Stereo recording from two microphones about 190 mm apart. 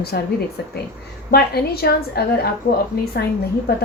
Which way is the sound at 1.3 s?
55° left (ahead or behind).